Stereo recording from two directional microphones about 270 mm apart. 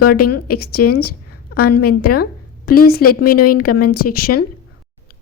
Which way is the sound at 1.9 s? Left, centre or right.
Left.